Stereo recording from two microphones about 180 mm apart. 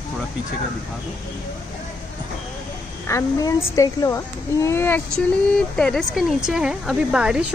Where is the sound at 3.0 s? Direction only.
15° left (ahead or behind).